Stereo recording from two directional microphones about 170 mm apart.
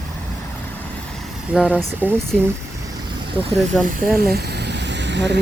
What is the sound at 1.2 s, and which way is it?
Vehicle, 5° right (ahead or behind).